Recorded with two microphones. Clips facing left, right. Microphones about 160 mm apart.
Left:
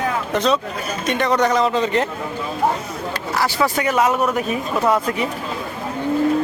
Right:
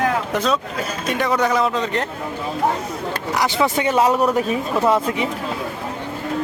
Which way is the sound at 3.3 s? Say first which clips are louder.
Even; 20° right (ahead or behind).